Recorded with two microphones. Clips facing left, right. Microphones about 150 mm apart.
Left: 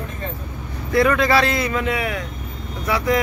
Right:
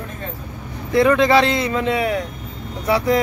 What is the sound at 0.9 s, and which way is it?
Speech, 20° right (ahead or behind).